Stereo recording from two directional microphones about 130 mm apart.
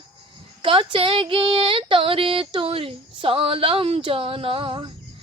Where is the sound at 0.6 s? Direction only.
45° right (ahead or behind).